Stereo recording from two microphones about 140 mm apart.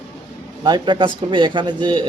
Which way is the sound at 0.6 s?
30° right (ahead or behind).